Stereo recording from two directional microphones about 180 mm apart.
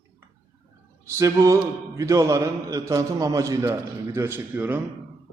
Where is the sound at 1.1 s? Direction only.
15° right (ahead or behind).